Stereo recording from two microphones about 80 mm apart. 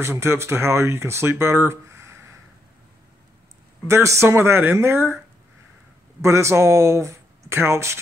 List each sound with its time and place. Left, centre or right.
0.0 s speech: right
3.8 s speech: right
6.2 s speech: right